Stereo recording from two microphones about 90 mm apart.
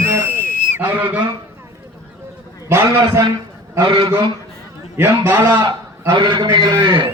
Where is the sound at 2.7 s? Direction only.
30° right (ahead or behind).